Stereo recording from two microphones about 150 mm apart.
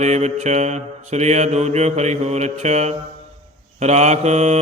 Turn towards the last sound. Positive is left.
turn(degrees=-50)  # may be behind; listen again after turning